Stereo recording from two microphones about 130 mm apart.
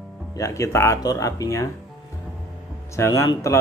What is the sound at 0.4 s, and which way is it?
Speech, 25° left (ahead or behind).